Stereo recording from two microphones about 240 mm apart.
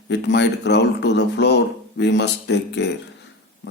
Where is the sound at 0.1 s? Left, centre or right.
Left.